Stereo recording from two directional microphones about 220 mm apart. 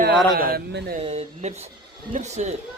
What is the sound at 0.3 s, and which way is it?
Speech, 45° right (ahead or behind).